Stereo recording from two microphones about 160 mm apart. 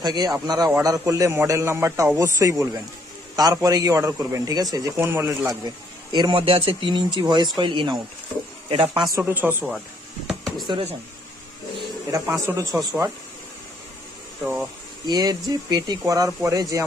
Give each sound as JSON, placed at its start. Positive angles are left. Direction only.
{"t": 0.0, "sound": "speech", "side_deg": -25}
{"t": 9.1, "sound": "speech", "side_deg": -10}
{"t": 10.2, "sound": "a sound", "side_deg": 0}
{"t": 10.7, "sound": "speech", "side_deg": -35}
{"t": 12.1, "sound": "speech", "side_deg": -20}
{"t": 14.4, "sound": "speech", "side_deg": -5}
{"t": 15.0, "sound": "speech", "side_deg": -25}